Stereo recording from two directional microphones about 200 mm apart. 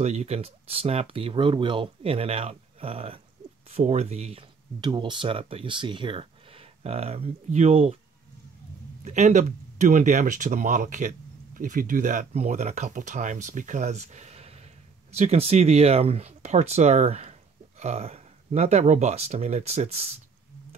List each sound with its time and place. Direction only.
0.0 s speech: 35° right (ahead or behind)
9.0 s speech: 35° right (ahead or behind)